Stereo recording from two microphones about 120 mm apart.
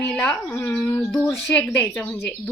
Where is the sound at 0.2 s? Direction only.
15° left (ahead or behind).